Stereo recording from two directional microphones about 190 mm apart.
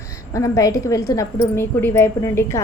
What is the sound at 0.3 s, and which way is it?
A woman's voice, 15° left (ahead or behind).